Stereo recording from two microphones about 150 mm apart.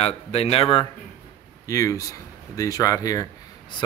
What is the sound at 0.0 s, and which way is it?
Speech, 45° left (ahead or behind).